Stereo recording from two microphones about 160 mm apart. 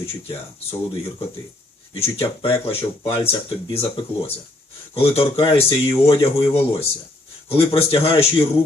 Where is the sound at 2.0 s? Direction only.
35° left (ahead or behind).